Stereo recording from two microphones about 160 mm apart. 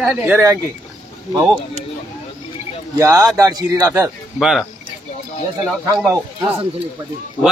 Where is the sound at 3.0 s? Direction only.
20° right (ahead or behind).